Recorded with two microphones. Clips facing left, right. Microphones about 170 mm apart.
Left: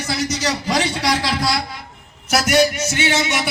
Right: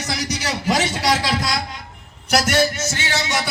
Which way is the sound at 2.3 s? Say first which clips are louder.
Left 2 dB; 10° left (ahead or behind).